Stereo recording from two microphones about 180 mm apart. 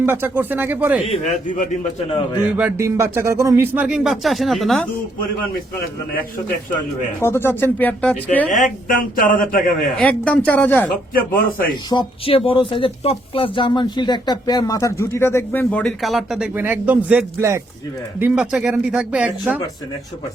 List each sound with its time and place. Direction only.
0.0 s speech: 10° right (ahead or behind)
1.1 s speech: 45° left (ahead or behind)
2.6 s speech: 10° right (ahead or behind)
7.2 s speech: 15° left (ahead or behind)
8.4 s speech: 50° left (ahead or behind)
10.0 s speech: 5° left (ahead or behind)
11.1 s speech: 55° left (ahead or behind)
11.7 s speech: 25° left (ahead or behind); by 19.5 s 5° right (ahead or behind)